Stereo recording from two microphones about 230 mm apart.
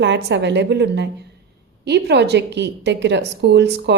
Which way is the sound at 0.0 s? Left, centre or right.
Right.